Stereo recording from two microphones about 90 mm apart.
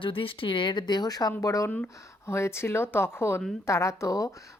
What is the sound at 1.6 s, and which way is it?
Speech, 20° left (ahead or behind).